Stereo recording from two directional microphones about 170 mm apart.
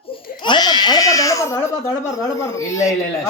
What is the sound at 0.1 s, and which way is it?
Baby cry, 25° left (ahead or behind).